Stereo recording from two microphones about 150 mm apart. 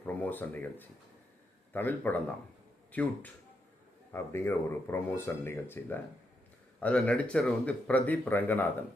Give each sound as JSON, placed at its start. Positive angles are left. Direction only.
{"t": 0.0, "sound": "speech", "side_deg": 10}